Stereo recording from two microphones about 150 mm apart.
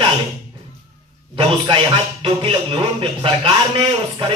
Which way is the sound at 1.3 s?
35° right (ahead or behind).